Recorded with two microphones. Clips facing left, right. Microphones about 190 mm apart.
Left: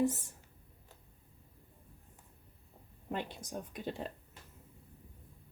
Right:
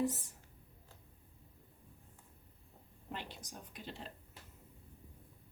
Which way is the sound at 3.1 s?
50° left (ahead or behind).